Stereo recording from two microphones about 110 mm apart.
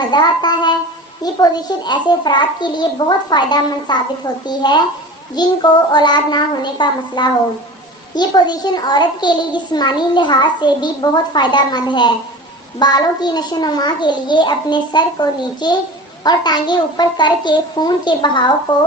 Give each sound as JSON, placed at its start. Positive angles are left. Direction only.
{"t": 0.1, "sound": "a child's voice", "side_deg": 40}